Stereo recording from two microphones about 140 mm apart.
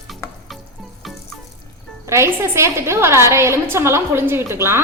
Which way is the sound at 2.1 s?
20° right (ahead or behind).